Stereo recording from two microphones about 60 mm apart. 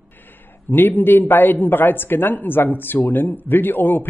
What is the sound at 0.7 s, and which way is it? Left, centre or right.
A man's voice, left.